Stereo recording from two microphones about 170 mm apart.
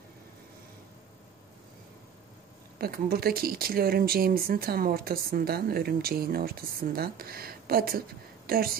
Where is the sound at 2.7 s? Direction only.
65° right (ahead or behind).